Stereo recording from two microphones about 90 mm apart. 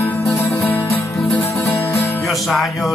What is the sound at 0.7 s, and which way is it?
Music, 20° left (ahead or behind).